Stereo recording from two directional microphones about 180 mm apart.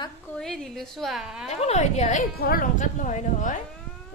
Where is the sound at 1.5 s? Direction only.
40° left (ahead or behind).